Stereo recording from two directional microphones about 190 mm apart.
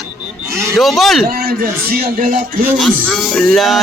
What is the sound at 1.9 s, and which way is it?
Music, 50° right (ahead or behind).